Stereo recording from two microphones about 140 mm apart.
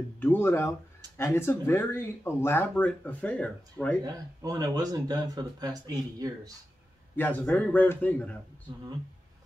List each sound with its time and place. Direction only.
0.2 s speech: 15° left (ahead or behind)
4.0 s speech: 25° right (ahead or behind)
7.2 s speech: 15° left (ahead or behind)